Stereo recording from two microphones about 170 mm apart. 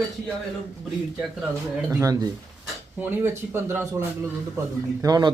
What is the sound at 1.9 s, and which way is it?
Speech, 20° right (ahead or behind).